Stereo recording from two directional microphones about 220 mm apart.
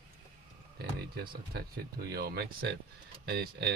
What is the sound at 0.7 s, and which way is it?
Speech, 45° right (ahead or behind).